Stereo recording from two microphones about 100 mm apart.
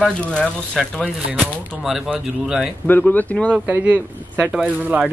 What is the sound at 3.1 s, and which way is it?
Speech, 15° left (ahead or behind).